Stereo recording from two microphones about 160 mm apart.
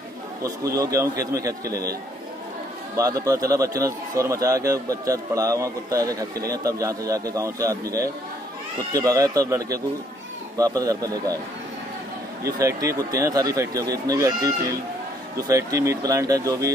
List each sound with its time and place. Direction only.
0.7 s a man's voice: 20° right (ahead or behind)
3.0 s a man's voice: 20° right (ahead or behind)
12.4 s a man's voice: 20° right (ahead or behind)